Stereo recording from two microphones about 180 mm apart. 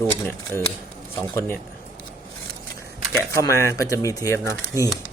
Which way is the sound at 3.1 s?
15° left (ahead or behind).